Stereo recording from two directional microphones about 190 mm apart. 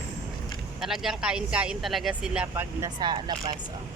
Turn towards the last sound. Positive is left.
turn(degrees=-25)  # may be behind; listen again after turning